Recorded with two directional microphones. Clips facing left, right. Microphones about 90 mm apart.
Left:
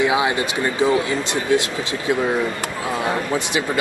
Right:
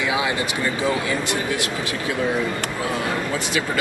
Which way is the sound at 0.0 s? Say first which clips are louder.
Left 4 dB; 25° left (ahead or behind).